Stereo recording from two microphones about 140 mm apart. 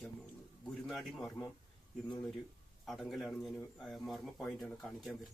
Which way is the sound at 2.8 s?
Centre (ahead or behind).